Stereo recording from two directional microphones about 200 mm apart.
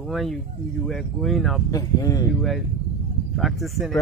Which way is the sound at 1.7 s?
15° left (ahead or behind).